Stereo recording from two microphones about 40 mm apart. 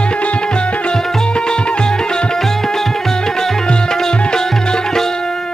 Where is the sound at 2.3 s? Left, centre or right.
Centre.